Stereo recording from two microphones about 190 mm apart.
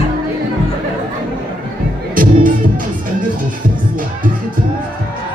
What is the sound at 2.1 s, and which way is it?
Music, 45° right (ahead or behind).